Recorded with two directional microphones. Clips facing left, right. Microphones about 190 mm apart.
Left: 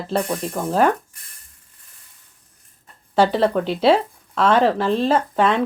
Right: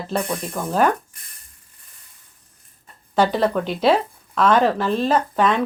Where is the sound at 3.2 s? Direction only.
30° left (ahead or behind).